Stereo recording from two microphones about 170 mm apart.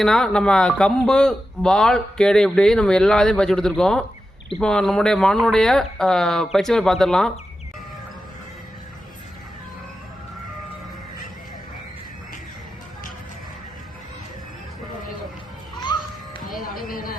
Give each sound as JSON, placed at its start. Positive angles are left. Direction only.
{"t": 0.0, "sound": "a man's voice", "side_deg": 0}
{"t": 15.7, "sound": "music", "side_deg": 25}
{"t": 16.9, "sound": "a sound", "side_deg": 55}